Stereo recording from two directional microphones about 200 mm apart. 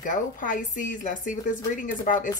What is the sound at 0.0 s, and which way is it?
Speech, 40° left (ahead or behind).